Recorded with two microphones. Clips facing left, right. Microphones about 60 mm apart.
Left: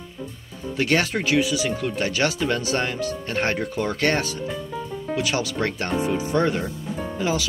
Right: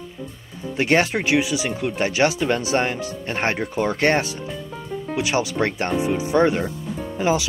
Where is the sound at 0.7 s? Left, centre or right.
Right.